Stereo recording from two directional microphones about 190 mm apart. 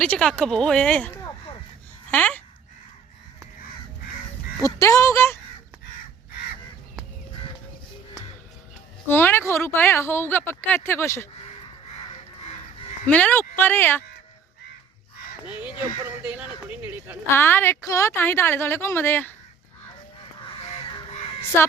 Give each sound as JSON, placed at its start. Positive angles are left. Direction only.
{"t": 0.0, "sound": "speech", "side_deg": 5}
{"t": 4.6, "sound": "speech", "side_deg": 15}
{"t": 9.0, "sound": "speech", "side_deg": 10}
{"t": 13.1, "sound": "speech", "side_deg": 10}
{"t": 16.2, "sound": "speech", "side_deg": -5}
{"t": 17.3, "sound": "speech", "side_deg": 10}
{"t": 20.6, "sound": "crow", "side_deg": 25}